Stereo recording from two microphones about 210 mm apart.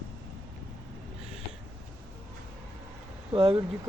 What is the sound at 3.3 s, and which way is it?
Speech, 25° right (ahead or behind).